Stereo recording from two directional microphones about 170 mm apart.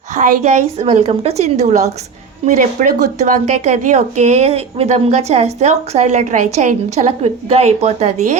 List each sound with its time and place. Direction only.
0.1 s speech: 45° right (ahead or behind)